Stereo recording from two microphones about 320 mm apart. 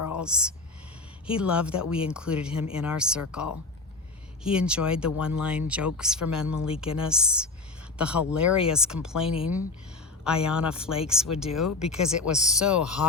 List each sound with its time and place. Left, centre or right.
0.1 s speech: centre